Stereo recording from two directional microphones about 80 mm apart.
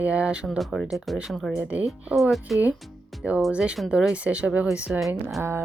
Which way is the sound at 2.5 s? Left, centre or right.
Centre.